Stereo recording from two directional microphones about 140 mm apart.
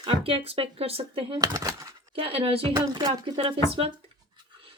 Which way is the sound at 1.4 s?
25° right (ahead or behind).